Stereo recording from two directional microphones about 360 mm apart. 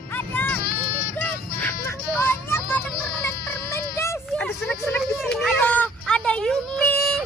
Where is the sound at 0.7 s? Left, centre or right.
Left.